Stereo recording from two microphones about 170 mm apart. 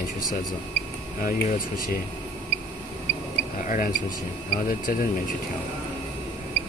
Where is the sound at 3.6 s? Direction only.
50° left (ahead or behind).